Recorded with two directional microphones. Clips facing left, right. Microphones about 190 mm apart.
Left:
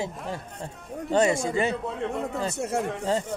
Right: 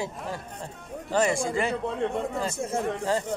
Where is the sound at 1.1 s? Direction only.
25° left (ahead or behind).